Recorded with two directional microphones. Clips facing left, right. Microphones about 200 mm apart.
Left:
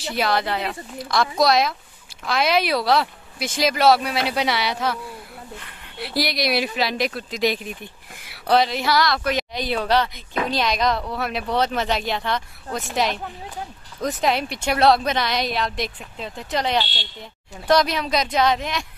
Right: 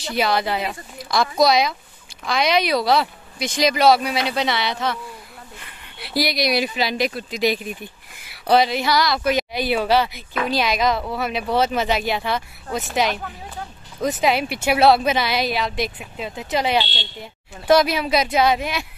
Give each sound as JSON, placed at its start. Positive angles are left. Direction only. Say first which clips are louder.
{"t": 0.0, "sound": "speech", "louder": "right 1 dB", "side_deg": 0}
{"t": 16.8, "sound": "speech", "louder": "right 2 dB", "side_deg": -25}
{"t": 17.2, "sound": "speech", "louder": "right 1 dB", "side_deg": -5}